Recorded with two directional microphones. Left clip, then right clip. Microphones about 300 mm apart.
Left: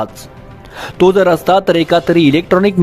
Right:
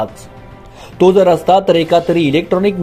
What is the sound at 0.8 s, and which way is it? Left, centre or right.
Speech, left.